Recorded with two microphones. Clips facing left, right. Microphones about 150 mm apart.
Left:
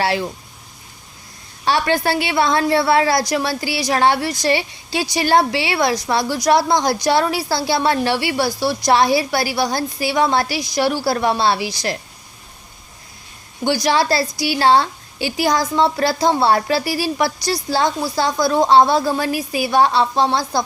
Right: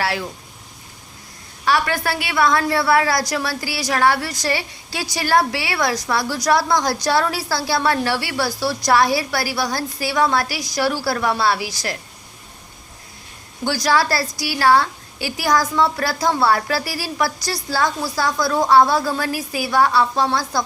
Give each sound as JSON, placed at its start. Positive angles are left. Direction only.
{"t": 0.0, "sound": "a woman's voice", "side_deg": 25}
{"t": 1.6, "sound": "a woman's voice", "side_deg": 25}
{"t": 13.7, "sound": "a woman's voice", "side_deg": 20}